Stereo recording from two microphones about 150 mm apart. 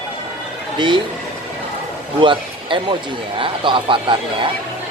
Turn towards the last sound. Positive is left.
turn(degrees=-35)  # may be behind; listen again after turning